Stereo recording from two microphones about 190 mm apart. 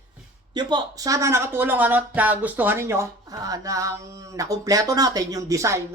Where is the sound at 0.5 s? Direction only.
20° right (ahead or behind).